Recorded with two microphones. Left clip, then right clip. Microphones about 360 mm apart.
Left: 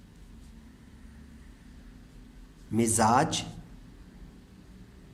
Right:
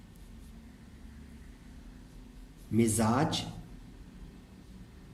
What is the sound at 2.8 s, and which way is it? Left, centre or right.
Speech, centre.